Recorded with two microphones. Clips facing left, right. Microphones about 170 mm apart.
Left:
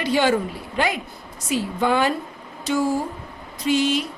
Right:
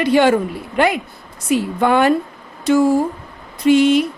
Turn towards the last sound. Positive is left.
turn(degrees=-60)  # may be behind; listen again after turning